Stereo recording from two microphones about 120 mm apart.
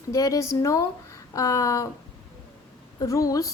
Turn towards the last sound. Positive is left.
turn(degrees=30)  # may be behind; listen again after turning